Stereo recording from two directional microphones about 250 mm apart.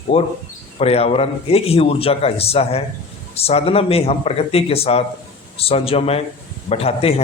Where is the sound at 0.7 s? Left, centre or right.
Left.